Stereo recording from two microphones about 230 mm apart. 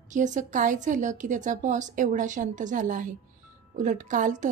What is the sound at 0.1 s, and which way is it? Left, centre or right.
A woman's voice, right.